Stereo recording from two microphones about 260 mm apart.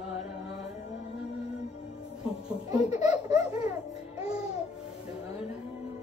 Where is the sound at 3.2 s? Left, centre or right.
Centre.